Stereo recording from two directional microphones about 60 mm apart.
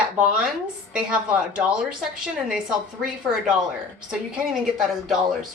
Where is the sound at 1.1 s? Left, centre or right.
Centre.